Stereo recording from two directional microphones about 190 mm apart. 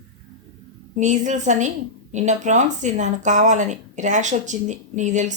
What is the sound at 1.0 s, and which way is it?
A woman's voice, 40° right (ahead or behind).